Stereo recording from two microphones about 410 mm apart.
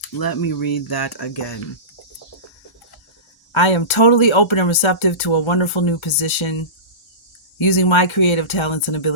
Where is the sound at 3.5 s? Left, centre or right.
Left.